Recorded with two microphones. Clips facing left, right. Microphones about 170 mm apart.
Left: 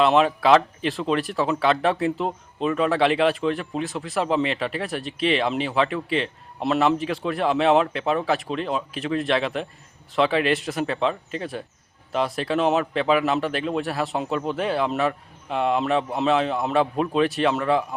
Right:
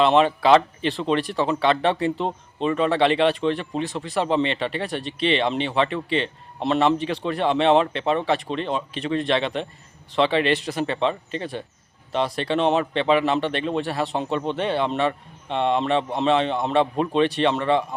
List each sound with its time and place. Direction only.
0.0 s speech: centre (ahead or behind)